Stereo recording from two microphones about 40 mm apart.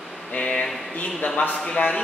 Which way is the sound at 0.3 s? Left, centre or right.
Left.